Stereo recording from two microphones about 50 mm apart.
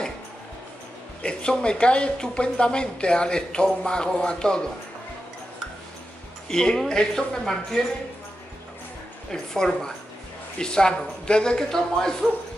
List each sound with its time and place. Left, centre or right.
1.2 s a woman's voice: centre
6.5 s a woman's voice: centre
9.3 s a woman's voice: centre